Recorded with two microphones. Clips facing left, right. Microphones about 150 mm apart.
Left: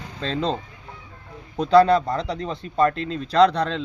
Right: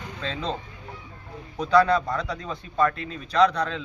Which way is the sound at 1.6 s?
30° left (ahead or behind).